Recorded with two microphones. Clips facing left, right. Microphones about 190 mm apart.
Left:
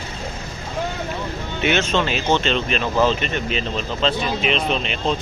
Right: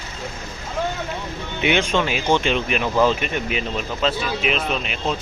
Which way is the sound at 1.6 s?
15° right (ahead or behind).